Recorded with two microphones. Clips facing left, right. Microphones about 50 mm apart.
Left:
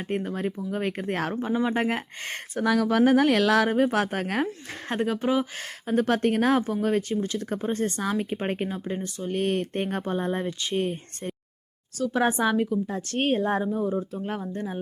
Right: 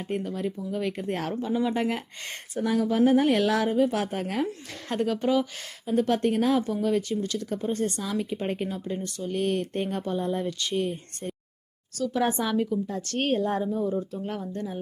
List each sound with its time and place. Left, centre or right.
0.1 s speech: left
2.6 s speech: left
3.8 s speech: left
4.9 s speech: left
5.5 s speech: left
6.8 s speech: left
10.4 s speech: left
10.8 s speech: left